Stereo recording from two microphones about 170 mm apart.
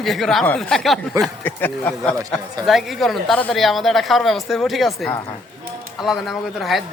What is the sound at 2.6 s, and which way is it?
Speech, centre (ahead or behind).